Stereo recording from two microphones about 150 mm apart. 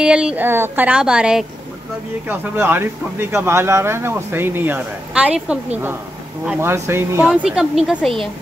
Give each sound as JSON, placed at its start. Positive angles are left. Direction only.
{"t": 0.0, "sound": "speech", "side_deg": -5}
{"t": 7.2, "sound": "speech", "side_deg": -5}